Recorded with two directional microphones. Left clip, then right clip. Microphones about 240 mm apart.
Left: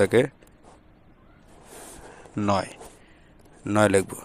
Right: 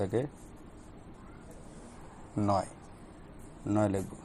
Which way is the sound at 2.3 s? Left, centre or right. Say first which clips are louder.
Left 5 dB; left.